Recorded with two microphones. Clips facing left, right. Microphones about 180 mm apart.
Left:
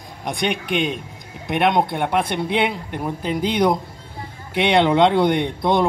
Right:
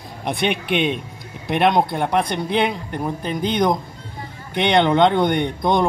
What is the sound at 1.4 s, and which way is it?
Speech, centre (ahead or behind).